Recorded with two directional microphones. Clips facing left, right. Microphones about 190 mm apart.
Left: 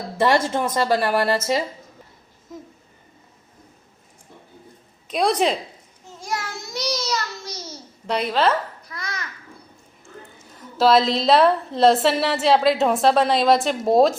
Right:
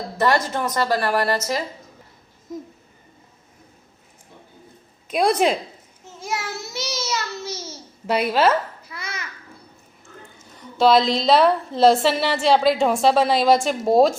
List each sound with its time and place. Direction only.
0.2 s a woman's voice: 25° left (ahead or behind)
5.0 s a woman's voice: centre (ahead or behind)
6.1 s a sound: 5° right (ahead or behind)
6.5 s child singing: 5° right (ahead or behind)
8.9 s babbling: 5° right (ahead or behind)
10.6 s a woman's voice: centre (ahead or behind)